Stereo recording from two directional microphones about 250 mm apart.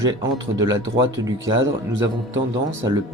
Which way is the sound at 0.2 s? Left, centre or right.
Centre.